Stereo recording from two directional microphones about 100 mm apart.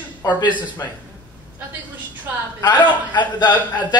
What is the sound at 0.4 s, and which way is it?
Speech, 50° left (ahead or behind).